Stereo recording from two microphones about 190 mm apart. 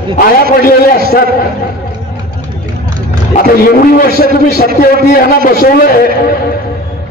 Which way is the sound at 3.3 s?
50° left (ahead or behind).